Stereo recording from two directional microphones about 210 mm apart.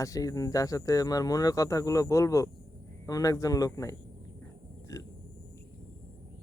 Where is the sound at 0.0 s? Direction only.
15° left (ahead or behind).